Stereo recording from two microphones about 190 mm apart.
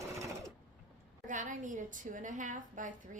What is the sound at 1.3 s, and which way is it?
A woman's voice, 40° right (ahead or behind).